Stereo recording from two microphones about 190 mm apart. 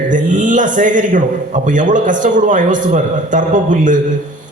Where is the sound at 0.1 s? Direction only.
40° right (ahead or behind).